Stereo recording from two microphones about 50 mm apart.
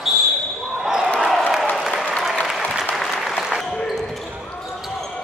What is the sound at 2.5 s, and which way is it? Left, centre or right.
Applause, centre.